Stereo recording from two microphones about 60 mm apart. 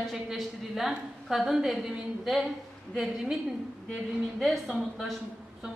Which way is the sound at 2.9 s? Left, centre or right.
Centre.